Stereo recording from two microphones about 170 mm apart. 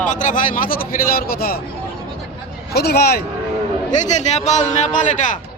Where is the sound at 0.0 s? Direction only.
50° left (ahead or behind).